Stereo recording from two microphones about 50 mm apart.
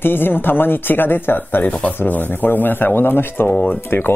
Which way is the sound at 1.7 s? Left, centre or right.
Left.